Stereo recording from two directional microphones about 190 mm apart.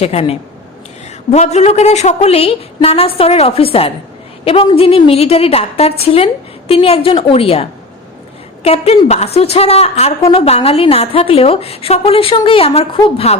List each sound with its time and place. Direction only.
0.0 s a woman's voice: 30° left (ahead or behind)